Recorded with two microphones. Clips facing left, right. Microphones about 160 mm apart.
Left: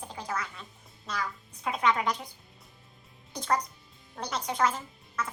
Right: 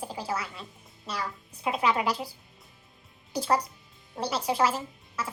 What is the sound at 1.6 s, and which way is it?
Speech, 10° right (ahead or behind).